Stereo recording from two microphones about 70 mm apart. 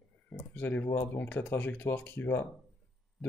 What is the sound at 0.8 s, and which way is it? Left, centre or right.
Speech, left.